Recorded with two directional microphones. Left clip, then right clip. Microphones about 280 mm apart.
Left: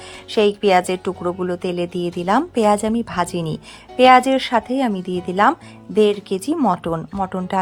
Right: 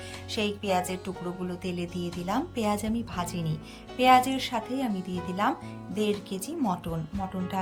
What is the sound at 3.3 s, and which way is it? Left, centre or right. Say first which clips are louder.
Speech: left 11 dB; centre.